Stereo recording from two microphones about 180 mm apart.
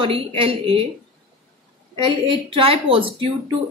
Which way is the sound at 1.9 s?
30° right (ahead or behind).